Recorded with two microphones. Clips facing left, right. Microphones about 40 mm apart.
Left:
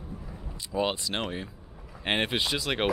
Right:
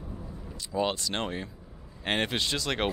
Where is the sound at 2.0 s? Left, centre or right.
Centre.